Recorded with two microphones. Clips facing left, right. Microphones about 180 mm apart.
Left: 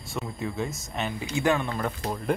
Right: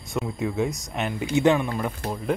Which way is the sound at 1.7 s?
5° right (ahead or behind).